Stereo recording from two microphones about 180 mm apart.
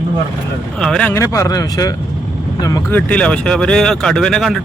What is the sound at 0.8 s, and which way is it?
Speech, 5° left (ahead or behind).